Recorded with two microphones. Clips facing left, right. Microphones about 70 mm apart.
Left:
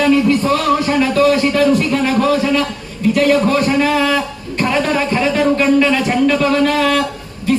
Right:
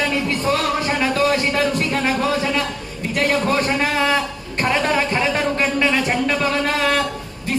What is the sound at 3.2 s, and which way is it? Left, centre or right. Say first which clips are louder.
A man's voice: left 5 dB; right.